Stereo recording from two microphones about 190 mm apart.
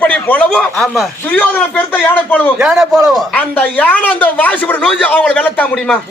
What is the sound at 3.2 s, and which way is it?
Speech, 5° left (ahead or behind).